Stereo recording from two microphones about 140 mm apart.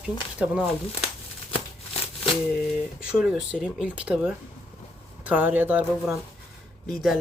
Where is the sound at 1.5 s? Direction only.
45° left (ahead or behind).